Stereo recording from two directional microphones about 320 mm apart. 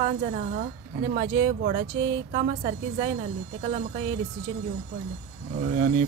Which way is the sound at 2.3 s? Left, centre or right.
Centre.